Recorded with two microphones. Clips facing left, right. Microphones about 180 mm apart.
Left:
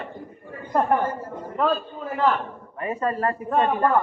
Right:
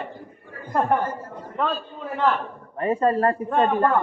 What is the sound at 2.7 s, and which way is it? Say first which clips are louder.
Speech: right 5 dB; 30° right (ahead or behind).